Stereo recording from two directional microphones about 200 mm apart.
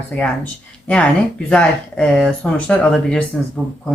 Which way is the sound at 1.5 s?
5° left (ahead or behind).